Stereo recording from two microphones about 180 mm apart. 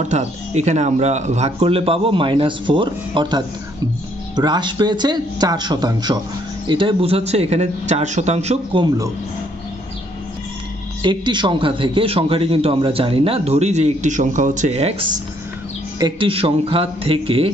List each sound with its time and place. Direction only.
0.1 s a man's voice: 40° right (ahead or behind)
11.0 s a man's voice: 25° right (ahead or behind)